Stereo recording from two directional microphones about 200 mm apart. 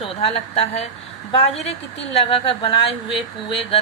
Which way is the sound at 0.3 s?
30° left (ahead or behind).